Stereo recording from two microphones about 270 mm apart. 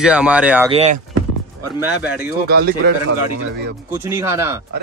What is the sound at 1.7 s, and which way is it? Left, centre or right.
Speech, centre.